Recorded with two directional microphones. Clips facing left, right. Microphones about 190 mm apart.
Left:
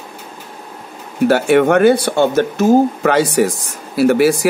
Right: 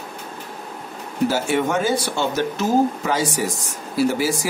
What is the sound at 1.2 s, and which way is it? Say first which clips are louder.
Speech: left 9 dB; 65° left (ahead or behind).